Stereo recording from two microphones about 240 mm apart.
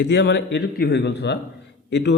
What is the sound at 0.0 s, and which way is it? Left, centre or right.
A man's voice, left.